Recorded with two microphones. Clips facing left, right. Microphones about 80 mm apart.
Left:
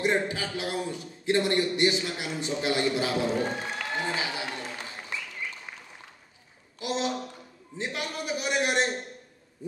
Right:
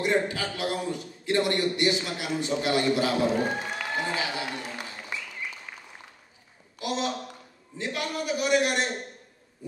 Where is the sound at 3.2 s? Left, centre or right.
Centre.